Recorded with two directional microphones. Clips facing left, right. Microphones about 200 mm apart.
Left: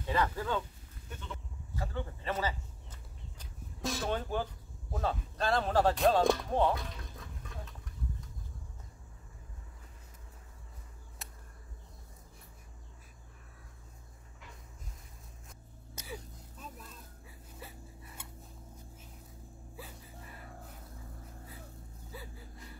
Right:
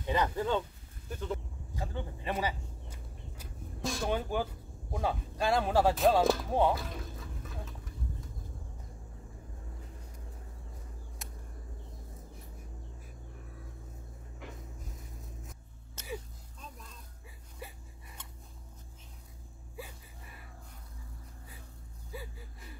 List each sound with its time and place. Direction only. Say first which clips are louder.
0.0 s speech: right 2 dB; 20° right (ahead or behind)
1.1 s goat: right 9 dB; 35° right (ahead or behind)
1.8 s vehicle: even; 15° right (ahead or behind)
3.3 s vehicle: right 6 dB; centre (ahead or behind)
4.1 s speech: right 2 dB; 10° right (ahead or behind)
11.2 s a sound: right 1 dB; centre (ahead or behind)
16.5 s music: left 1 dB; 5° left (ahead or behind)
22.1 s a sound: right 4 dB; 15° right (ahead or behind)